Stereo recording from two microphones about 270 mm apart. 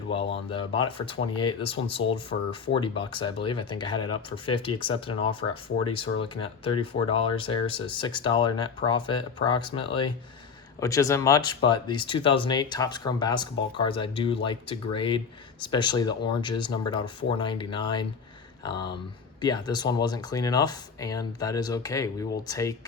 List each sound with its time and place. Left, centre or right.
0.5 s speech: centre